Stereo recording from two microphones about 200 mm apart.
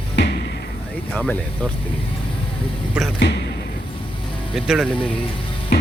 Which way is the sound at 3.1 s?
60° left (ahead or behind).